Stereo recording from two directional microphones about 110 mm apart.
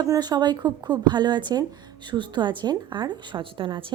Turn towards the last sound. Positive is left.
turn(degrees=-50)  # may be behind; listen again after turning